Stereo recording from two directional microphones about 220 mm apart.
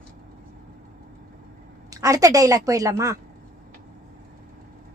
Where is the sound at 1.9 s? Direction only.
15° right (ahead or behind).